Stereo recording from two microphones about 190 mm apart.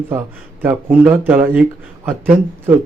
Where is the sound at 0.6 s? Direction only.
10° right (ahead or behind).